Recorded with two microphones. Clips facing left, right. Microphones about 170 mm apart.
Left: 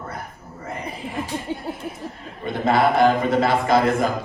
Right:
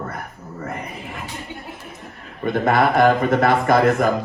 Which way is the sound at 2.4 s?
55° right (ahead or behind).